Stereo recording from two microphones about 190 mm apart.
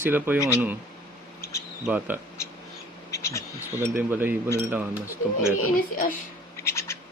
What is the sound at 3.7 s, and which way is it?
Speech, 10° right (ahead or behind).